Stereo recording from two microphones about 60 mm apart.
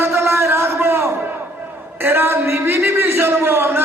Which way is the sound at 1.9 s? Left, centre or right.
Right.